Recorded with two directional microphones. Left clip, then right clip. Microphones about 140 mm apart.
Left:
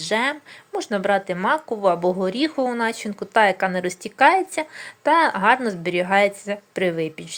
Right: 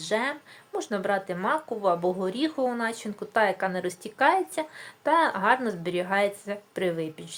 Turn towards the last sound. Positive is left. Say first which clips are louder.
# left 6 dB
turn(degrees=35)  # may be behind; listen again after turning